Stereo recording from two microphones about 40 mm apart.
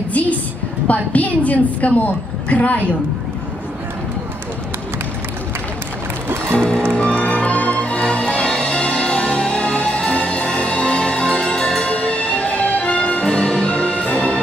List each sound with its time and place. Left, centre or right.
0.1 s a woman's voice: left
6.6 s music: left